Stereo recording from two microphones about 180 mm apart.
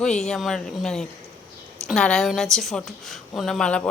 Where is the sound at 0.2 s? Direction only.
Centre (ahead or behind).